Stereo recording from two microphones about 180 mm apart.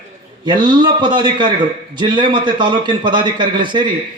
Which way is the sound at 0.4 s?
25° right (ahead or behind).